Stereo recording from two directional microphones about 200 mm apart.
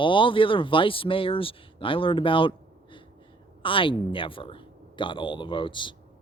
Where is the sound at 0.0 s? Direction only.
25° left (ahead or behind).